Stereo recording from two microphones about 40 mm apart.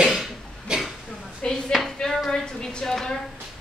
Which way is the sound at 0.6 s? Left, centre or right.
Centre.